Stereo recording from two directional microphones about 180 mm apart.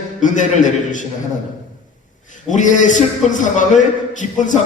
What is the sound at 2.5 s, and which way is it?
A man's voice, 45° left (ahead or behind).